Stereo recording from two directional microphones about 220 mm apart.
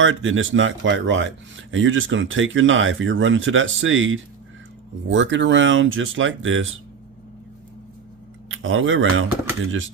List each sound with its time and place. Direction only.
0.0 s speech: 65° right (ahead or behind)
8.4 s speech: 65° right (ahead or behind)